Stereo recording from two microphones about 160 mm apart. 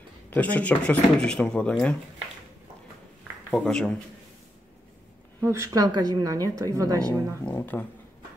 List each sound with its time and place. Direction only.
0.3 s speech: 10° left (ahead or behind)
3.5 s a man's voice: 5° left (ahead or behind)
5.4 s a woman's voice: 20° right (ahead or behind)
7.4 s speech: 10° left (ahead or behind)